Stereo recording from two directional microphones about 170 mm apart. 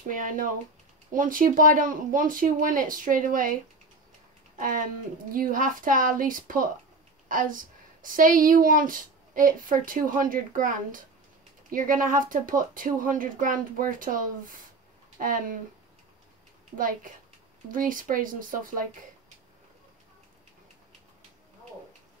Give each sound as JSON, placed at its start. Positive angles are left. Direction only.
{"t": 0.1, "sound": "speech", "side_deg": -55}
{"t": 4.6, "sound": "speech", "side_deg": -55}
{"t": 16.7, "sound": "speech", "side_deg": -55}